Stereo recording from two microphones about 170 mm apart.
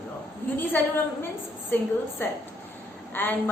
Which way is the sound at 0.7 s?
10° left (ahead or behind).